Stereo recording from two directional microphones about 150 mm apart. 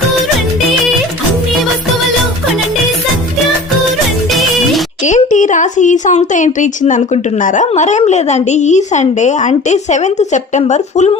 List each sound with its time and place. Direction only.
4.4 s music: centre (ahead or behind)
5.0 s speech: 55° left (ahead or behind)